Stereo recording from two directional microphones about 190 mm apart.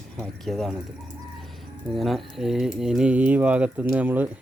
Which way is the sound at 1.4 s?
Centre (ahead or behind).